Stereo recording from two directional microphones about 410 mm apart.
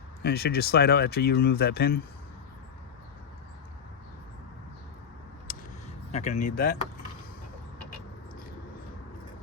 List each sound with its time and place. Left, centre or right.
0.2 s speech: left
5.5 s a sound: left
6.1 s speech: centre